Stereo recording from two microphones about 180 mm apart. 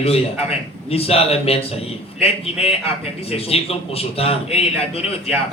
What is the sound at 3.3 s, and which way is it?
Speech, 35° left (ahead or behind).